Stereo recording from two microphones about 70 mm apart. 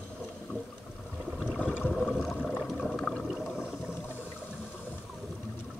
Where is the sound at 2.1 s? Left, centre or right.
Centre.